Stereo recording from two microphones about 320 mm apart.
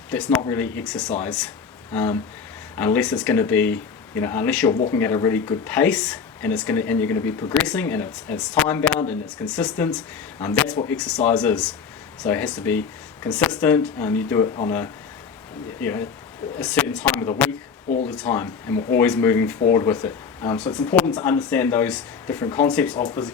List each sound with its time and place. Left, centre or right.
0.1 s speech: centre
15.8 s speech: centre
17.8 s speech: left
18.1 s speech: centre